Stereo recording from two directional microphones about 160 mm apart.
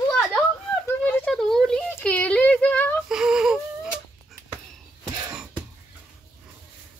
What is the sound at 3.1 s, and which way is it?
Wheeze, 5° right (ahead or behind).